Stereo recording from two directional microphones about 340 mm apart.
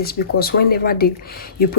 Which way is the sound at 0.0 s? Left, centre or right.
Left.